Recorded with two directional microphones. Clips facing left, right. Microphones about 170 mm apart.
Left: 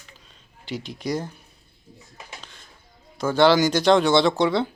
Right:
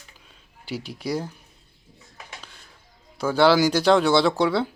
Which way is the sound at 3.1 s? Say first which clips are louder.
Left 1 dB; 10° right (ahead or behind).